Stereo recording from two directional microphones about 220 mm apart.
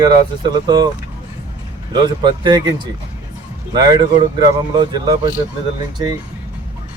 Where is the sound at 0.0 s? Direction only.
20° right (ahead or behind).